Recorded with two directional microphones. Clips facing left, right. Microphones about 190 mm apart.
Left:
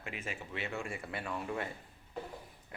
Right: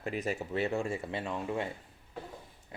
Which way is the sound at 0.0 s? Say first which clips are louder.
Right 9 dB; 40° right (ahead or behind).